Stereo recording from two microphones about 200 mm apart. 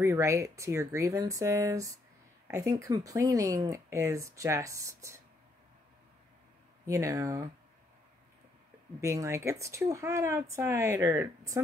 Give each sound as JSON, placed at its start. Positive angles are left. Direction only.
{"t": 0.0, "sound": "speech", "side_deg": -15}
{"t": 6.9, "sound": "speech", "side_deg": -15}
{"t": 9.0, "sound": "speech", "side_deg": -15}